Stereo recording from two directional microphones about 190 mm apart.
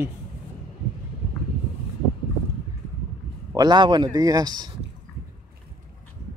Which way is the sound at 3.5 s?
20° right (ahead or behind).